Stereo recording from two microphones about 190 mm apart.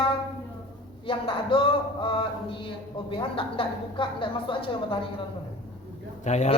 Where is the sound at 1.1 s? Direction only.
25° left (ahead or behind).